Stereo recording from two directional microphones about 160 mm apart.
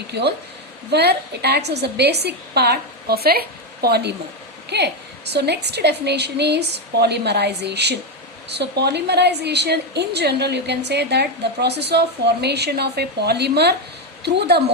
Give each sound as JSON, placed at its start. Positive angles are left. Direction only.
{"t": 0.1, "sound": "a woman's voice", "side_deg": -90}